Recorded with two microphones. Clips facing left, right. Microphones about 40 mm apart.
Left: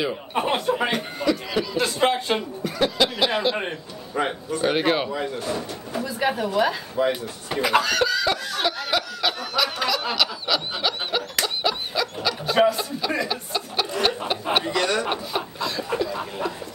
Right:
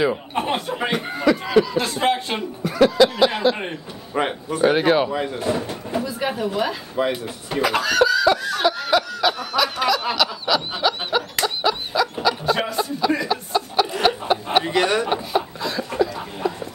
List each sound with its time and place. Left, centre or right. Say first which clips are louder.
0.3 s speech: left 1 dB; centre
1.0 s speech: right 4 dB; centre
4.3 s a sound: right 5 dB; centre
4.7 s speech: right 4 dB; centre
5.1 s speech: right 4 dB; right
6.0 s a sound: left 4 dB; centre
7.0 s speech: even; right
7.6 s snicker: right 2 dB; centre
14.0 s a sound: right 4 dB; centre
14.6 s chuckle: right 4 dB; right
15.0 s chuckle: right 4 dB; centre
16.1 s a sound: left 2 dB; centre